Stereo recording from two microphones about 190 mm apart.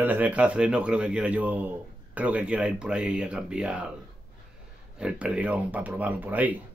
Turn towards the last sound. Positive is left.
turn(degrees=-10)  # may be behind; listen again after turning